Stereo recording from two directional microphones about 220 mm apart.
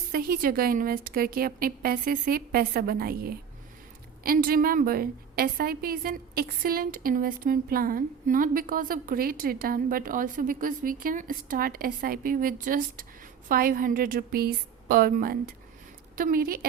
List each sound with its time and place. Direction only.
0.1 s a woman's voice: 40° right (ahead or behind)